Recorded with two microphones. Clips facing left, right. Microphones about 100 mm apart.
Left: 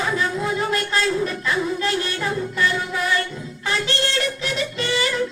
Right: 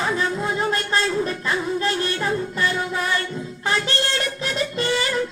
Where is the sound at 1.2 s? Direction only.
35° right (ahead or behind).